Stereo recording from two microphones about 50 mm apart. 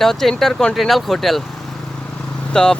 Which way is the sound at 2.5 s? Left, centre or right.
Centre.